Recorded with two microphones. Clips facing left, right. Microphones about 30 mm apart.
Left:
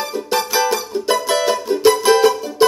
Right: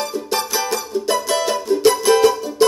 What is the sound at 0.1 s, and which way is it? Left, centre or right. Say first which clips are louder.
Music: left 3 dB; centre.